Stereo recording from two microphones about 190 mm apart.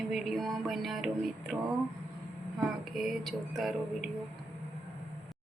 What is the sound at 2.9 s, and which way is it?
Speech, centre (ahead or behind).